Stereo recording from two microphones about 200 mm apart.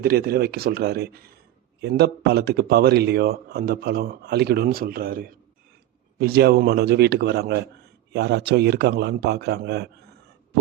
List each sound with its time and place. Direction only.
0.0 s a man's voice: 50° right (ahead or behind)